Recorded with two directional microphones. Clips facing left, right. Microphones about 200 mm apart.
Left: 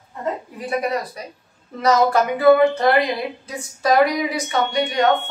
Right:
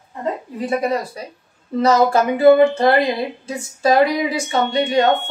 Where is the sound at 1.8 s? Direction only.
25° right (ahead or behind).